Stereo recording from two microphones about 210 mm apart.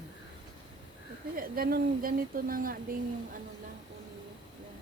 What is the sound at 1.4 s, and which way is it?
A woman's voice, 45° right (ahead or behind).